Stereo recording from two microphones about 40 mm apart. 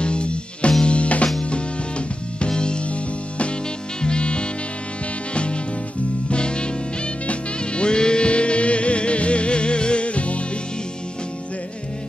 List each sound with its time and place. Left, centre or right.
0.0 s music: left